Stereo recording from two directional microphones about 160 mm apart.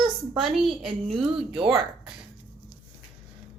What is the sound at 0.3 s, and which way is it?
Child singing, centre (ahead or behind).